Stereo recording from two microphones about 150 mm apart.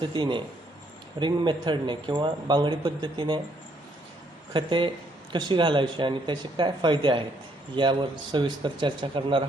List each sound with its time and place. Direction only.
0.0 s a man's voice: 30° right (ahead or behind)
4.5 s a man's voice: 35° right (ahead or behind)